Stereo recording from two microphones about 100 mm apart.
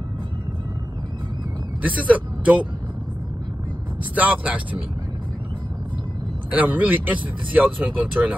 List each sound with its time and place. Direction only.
1.8 s speech: 15° right (ahead or behind)
4.1 s speech: 15° right (ahead or behind)
6.5 s speech: 15° right (ahead or behind)